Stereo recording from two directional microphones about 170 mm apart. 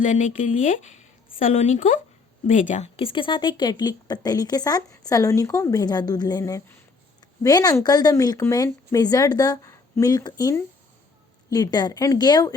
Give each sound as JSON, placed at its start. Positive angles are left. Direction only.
{"t": 0.0, "sound": "speech", "side_deg": 45}